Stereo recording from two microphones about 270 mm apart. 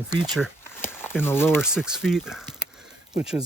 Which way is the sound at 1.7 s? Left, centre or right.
Centre.